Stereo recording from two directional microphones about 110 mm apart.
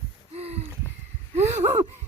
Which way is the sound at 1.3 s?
90° right.